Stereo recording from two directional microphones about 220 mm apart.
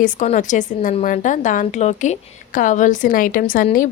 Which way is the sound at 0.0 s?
35° left (ahead or behind).